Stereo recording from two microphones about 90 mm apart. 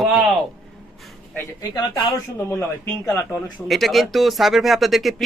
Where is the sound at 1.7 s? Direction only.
50° left (ahead or behind).